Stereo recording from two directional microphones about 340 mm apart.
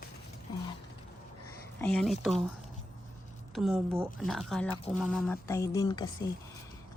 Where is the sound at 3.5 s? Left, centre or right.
Centre.